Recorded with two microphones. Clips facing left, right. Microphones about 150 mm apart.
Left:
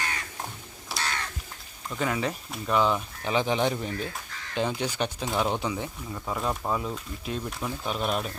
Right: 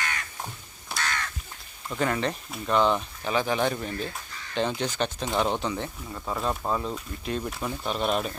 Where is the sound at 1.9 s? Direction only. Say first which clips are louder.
Right 2 dB; centre (ahead or behind).